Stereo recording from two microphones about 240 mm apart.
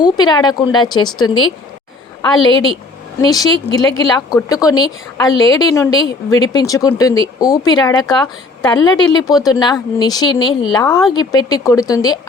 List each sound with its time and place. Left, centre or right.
0.0 s a woman's voice: centre
2.4 s a woman's voice: left
3.2 s a woman's voice: centre